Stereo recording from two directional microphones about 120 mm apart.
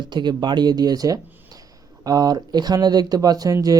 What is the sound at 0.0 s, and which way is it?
Speech, 40° right (ahead or behind).